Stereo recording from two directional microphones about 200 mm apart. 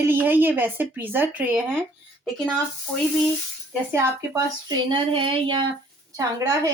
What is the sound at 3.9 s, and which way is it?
Speech, 15° right (ahead or behind).